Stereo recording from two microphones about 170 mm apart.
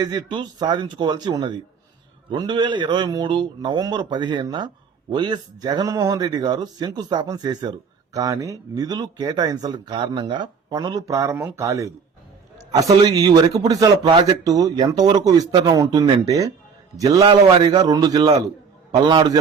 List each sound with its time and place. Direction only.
0.0 s speech: 25° right (ahead or behind)